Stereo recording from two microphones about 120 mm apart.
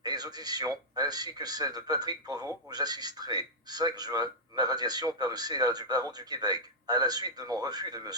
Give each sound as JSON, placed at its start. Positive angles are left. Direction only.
{"t": 0.0, "sound": "a man's voice", "side_deg": -35}